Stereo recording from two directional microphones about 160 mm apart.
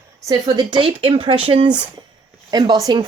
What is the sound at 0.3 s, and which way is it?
Speech, 25° right (ahead or behind).